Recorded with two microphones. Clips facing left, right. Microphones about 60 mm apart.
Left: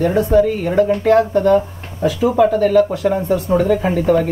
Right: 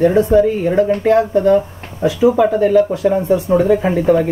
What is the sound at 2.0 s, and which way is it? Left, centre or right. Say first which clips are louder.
Speech: right 2 dB; centre.